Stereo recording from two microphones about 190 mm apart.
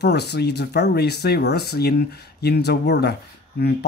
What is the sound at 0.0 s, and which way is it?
Speech, 60° left (ahead or behind).